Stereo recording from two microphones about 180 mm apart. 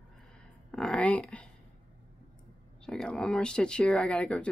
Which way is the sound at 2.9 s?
5° left (ahead or behind).